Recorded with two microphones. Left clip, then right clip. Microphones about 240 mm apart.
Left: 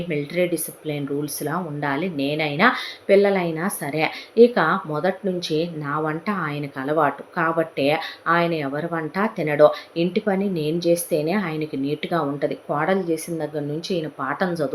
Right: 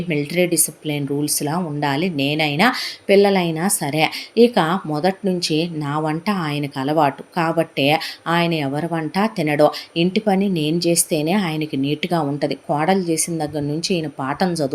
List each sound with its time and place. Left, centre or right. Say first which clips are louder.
0.1 s speech: right 4 dB; right